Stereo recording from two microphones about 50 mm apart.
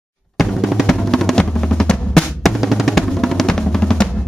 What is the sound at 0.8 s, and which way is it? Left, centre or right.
Drum, centre.